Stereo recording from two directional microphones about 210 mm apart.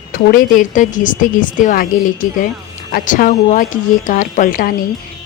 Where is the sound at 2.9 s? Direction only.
40° left (ahead or behind).